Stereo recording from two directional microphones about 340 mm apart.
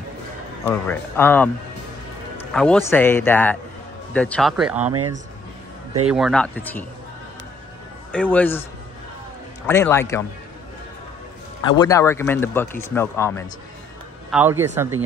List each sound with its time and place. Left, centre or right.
0.7 s speech: centre
2.3 s music: centre
2.9 s a man's voice: centre
4.9 s speech: right
6.0 s speech: centre
8.1 s speech: centre
9.7 s a man's voice: centre
11.6 s a man's voice: centre
14.3 s speech: centre